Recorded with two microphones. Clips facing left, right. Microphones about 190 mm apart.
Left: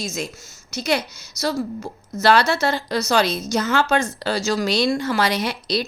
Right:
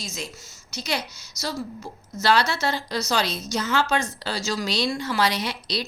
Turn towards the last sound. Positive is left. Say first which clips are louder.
# left 5 dB
turn(degrees=50)  # may be behind; listen again after turning